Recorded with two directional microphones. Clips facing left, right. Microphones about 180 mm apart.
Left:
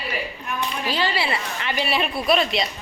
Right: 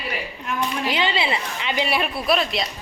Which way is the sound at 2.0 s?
Centre (ahead or behind).